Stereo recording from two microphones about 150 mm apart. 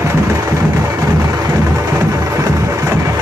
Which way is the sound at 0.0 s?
20° right (ahead or behind).